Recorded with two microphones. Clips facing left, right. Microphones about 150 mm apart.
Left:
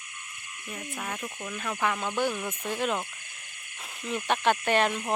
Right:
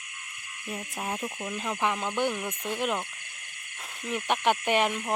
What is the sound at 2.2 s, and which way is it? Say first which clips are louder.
Snake: even; 15° right (ahead or behind).